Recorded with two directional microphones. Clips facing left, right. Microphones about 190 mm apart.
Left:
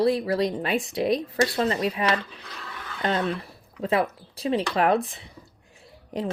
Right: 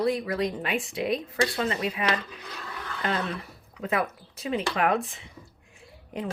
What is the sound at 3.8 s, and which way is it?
Speech, 30° left (ahead or behind).